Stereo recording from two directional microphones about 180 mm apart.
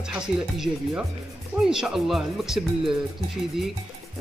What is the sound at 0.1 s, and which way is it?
Speech, 5° right (ahead or behind).